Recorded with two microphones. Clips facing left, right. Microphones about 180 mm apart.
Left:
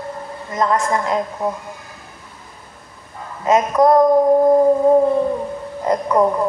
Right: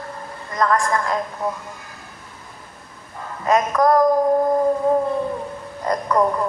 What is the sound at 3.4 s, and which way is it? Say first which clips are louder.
Speech: left 3 dB; 20° left (ahead or behind).